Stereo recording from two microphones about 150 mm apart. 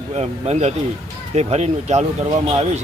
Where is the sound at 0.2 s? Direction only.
45° right (ahead or behind).